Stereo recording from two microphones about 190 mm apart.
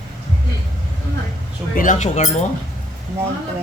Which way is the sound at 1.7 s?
45° left (ahead or behind).